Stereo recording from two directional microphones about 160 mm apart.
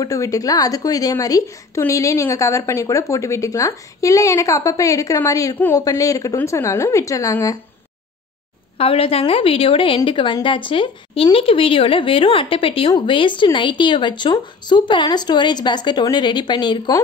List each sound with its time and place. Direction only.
0.0 s a woman's voice: 20° left (ahead or behind)
8.7 s a woman's voice: 35° left (ahead or behind)